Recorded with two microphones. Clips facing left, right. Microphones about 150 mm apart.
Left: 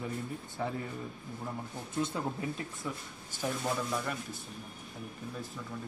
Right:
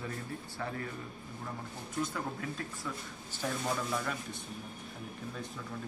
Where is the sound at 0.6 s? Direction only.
15° left (ahead or behind).